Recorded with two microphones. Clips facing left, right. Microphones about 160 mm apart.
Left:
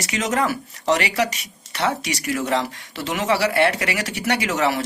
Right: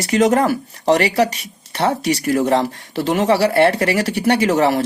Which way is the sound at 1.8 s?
35° right (ahead or behind).